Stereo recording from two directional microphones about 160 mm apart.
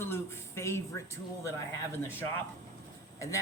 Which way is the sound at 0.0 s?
15° left (ahead or behind).